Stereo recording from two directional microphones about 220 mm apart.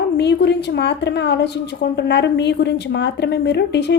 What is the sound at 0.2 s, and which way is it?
A woman's voice, 50° left (ahead or behind).